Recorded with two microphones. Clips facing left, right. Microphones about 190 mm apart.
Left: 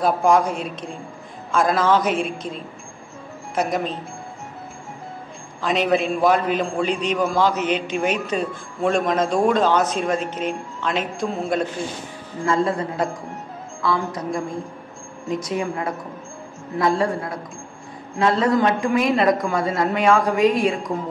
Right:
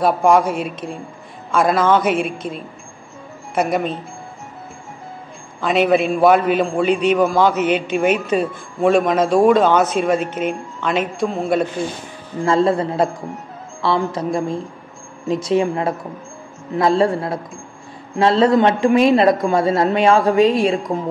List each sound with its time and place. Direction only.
0.0 s speech: centre (ahead or behind)
5.6 s speech: 5° right (ahead or behind)
12.4 s a man's voice: 30° right (ahead or behind)
14.1 s a woman's voice: 30° right (ahead or behind)